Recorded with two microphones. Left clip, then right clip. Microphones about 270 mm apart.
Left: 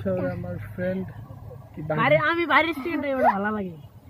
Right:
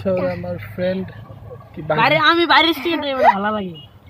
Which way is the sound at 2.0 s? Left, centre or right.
Right.